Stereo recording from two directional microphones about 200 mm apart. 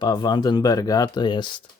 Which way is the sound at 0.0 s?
20° left (ahead or behind).